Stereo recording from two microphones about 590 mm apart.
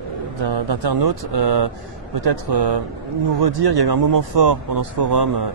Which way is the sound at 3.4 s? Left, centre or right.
Right.